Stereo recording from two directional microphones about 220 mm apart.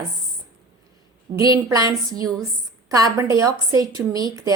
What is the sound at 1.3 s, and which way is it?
A woman's voice, 15° right (ahead or behind).